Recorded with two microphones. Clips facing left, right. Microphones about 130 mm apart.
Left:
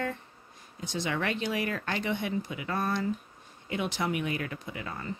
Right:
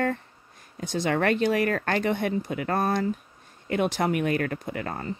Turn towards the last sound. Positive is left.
turn(degrees=-50)  # may be behind; listen again after turning